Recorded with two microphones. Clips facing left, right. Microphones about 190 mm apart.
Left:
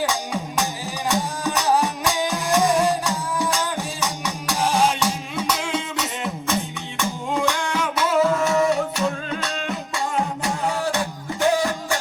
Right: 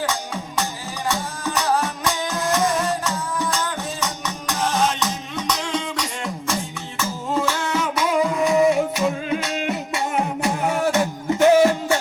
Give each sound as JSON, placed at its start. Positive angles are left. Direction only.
{"t": 0.1, "sound": "music", "side_deg": 15}
{"t": 8.7, "sound": "music", "side_deg": 0}
{"t": 9.6, "sound": "music", "side_deg": -20}